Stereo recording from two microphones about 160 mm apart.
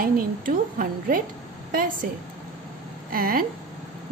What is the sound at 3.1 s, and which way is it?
Speech, 65° right (ahead or behind).